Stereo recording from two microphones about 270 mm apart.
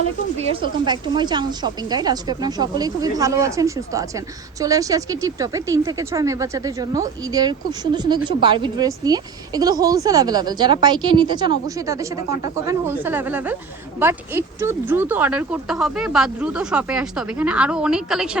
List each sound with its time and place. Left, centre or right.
0.3 s speech: centre